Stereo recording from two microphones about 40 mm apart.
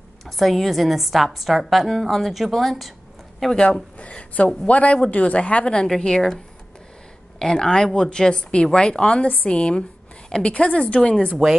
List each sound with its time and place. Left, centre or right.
0.4 s a woman's voice: centre
3.5 s a woman's voice: centre
5.9 s a woman's voice: centre